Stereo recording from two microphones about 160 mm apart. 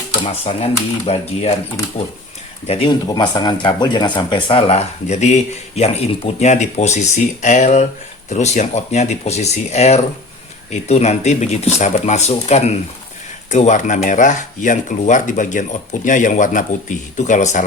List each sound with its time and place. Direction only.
0.3 s speech: 40° left (ahead or behind)
2.6 s speech: 35° left (ahead or behind)